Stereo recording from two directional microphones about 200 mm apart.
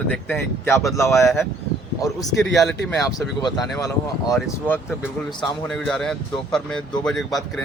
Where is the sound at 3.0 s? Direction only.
15° left (ahead or behind).